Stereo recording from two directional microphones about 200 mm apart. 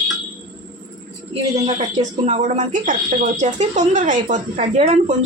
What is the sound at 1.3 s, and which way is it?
Speech, 30° right (ahead or behind).